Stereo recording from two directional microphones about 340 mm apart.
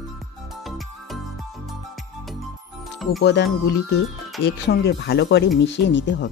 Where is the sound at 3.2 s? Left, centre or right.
Left.